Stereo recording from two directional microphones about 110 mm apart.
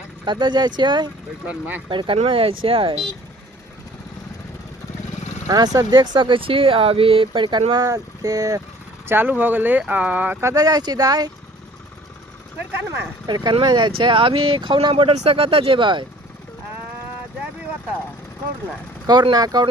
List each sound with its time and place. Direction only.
0.3 s speech: 45° right (ahead or behind)
1.5 s speech: 15° right (ahead or behind)
1.9 s speech: 50° right (ahead or behind)
5.5 s speech: 35° right (ahead or behind)
7.7 s speech: 35° right (ahead or behind)
9.0 s speech: 15° right (ahead or behind)
10.4 s speech: 35° right (ahead or behind)
12.5 s speech: 20° right (ahead or behind)
13.2 s speech: 40° right (ahead or behind)
19.0 s speech: 40° right (ahead or behind)